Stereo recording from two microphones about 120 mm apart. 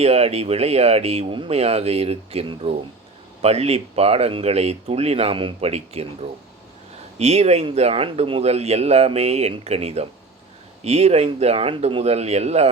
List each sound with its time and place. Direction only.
0.0 s speech: 60° right (ahead or behind)
7.2 s speech: 60° right (ahead or behind)